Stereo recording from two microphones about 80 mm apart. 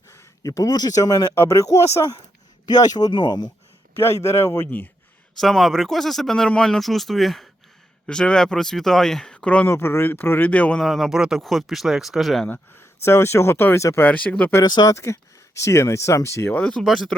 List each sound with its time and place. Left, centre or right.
0.1 s speech: left
2.6 s speech: left
3.9 s speech: left
5.4 s speech: centre
8.0 s speech: centre
9.6 s speech: left
10.8 s speech: centre
12.5 s speech: left
14.0 s speech: centre
14.6 s speech: left
14.9 s speech: left
16.6 s speech: centre